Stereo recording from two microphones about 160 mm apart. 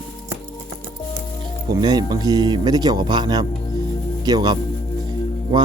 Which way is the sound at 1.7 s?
25° right (ahead or behind).